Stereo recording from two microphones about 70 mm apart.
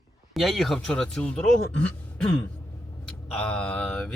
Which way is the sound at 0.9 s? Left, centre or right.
Centre.